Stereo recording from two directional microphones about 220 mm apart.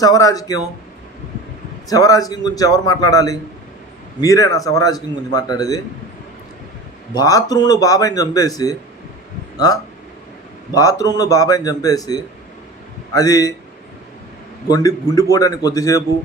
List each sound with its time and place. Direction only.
0.0 s a man's voice: 15° left (ahead or behind)
1.9 s a man's voice: 15° left (ahead or behind)
7.1 s a man's voice: 15° left (ahead or behind)
10.8 s a man's voice: 15° left (ahead or behind)
14.7 s a man's voice: 15° left (ahead or behind)